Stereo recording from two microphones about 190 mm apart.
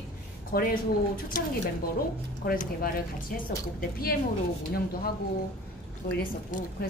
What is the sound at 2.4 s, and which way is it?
Speech, 45° left (ahead or behind).